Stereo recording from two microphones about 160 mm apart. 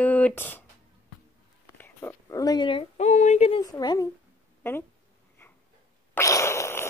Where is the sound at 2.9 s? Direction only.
45° left (ahead or behind).